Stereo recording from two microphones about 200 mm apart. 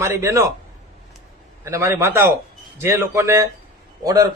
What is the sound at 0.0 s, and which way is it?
Speech, 15° right (ahead or behind).